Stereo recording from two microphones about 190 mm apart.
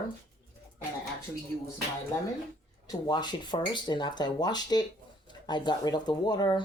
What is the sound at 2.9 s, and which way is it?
Speech, 20° left (ahead or behind).